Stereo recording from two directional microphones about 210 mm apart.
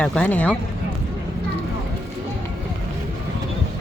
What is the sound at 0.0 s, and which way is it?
Speech, 5° left (ahead or behind).